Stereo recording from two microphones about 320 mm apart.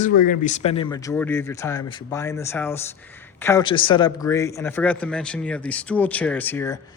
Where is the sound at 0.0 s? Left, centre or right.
Left.